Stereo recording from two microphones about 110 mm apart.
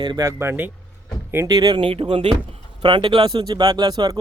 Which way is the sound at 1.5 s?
40° right (ahead or behind).